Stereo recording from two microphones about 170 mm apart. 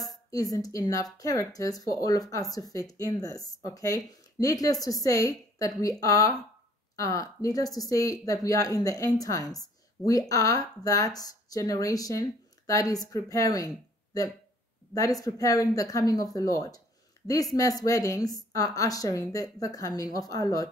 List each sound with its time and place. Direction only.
0.3 s speech: 20° left (ahead or behind)
17.8 s speech: 20° left (ahead or behind)